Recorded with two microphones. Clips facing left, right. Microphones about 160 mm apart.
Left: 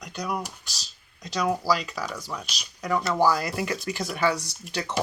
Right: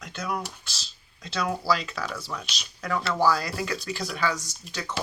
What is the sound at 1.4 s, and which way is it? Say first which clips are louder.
Speech: left 2 dB; 10° left (ahead or behind).